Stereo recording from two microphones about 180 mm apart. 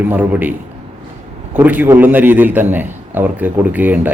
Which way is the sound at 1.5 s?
10° right (ahead or behind).